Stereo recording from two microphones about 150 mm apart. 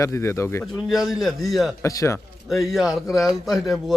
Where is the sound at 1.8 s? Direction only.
20° left (ahead or behind).